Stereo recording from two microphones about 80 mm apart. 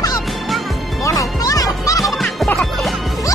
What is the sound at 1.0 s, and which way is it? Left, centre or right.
Music, left.